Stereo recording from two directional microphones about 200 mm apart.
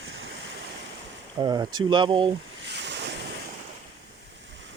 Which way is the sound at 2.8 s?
60° right (ahead or behind).